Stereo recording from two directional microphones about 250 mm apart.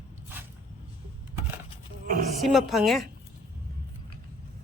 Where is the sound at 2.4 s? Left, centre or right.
Centre.